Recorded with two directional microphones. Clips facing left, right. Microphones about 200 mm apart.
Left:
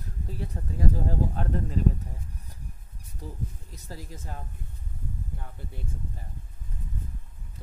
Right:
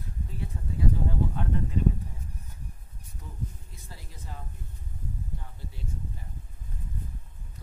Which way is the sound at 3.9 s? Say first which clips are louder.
Left 6 dB; 45° left (ahead or behind).